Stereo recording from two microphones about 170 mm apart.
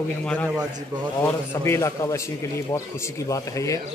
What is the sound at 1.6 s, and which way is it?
A man's voice, 15° left (ahead or behind).